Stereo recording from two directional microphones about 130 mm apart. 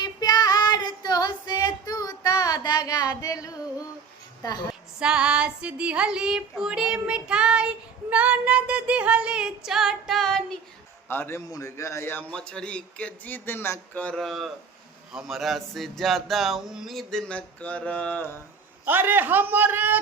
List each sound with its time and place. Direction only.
0.0 s child singing: 30° left (ahead or behind)
4.7 s female singing: 5° right (ahead or behind)
11.1 s a man's voice: 15° left (ahead or behind)
18.9 s female singing: 15° right (ahead or behind)